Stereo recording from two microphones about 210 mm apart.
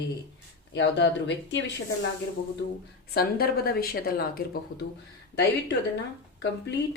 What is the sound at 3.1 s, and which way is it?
A woman's voice, 45° left (ahead or behind).